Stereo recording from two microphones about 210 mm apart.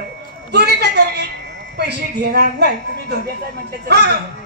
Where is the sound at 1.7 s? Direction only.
55° right (ahead or behind).